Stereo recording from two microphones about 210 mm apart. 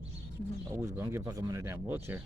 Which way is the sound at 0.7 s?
15° right (ahead or behind).